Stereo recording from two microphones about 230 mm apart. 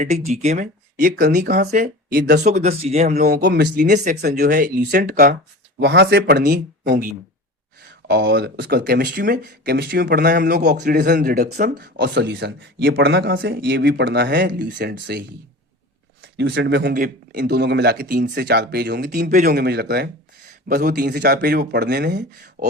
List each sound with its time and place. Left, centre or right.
0.0 s speech: right
2.5 s speech: right
3.1 s speech: right
16.2 s speech: right